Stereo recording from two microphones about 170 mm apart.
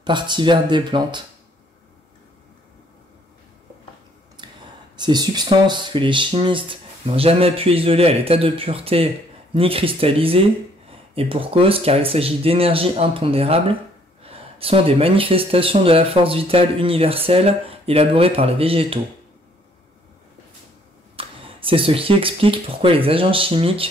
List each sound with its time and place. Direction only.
0.0 s speech: 25° right (ahead or behind)
4.4 s whispering: 25° right (ahead or behind)
4.9 s speech: 25° right (ahead or behind)
21.2 s speech: 30° right (ahead or behind)